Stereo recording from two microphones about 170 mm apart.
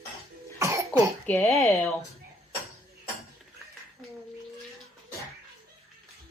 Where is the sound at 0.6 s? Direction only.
15° right (ahead or behind).